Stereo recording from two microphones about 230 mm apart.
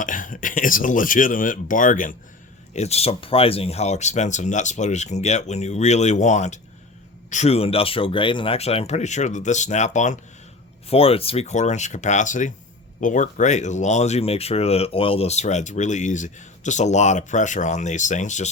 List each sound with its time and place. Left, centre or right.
0.0 s speech: left